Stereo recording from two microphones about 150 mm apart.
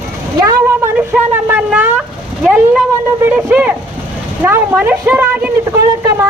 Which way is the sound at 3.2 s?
10° right (ahead or behind).